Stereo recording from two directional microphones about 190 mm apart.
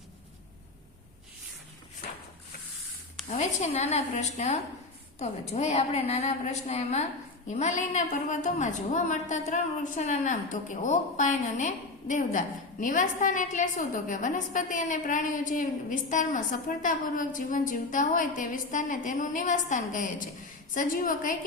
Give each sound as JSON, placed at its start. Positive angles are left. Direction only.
{"t": 3.2, "sound": "a woman's voice", "side_deg": 35}